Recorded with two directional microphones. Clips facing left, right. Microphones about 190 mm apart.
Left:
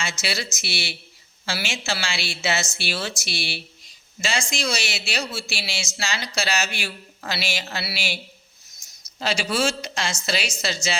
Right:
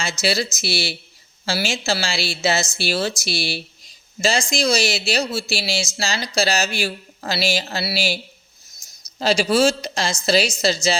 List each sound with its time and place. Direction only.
0.0 s speech: 35° right (ahead or behind)
8.8 s a sound: 35° right (ahead or behind)
9.1 s speech: 35° right (ahead or behind)